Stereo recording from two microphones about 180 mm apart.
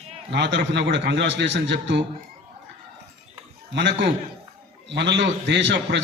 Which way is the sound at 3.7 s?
75° right (ahead or behind).